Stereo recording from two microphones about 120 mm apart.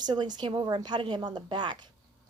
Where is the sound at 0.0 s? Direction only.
35° right (ahead or behind).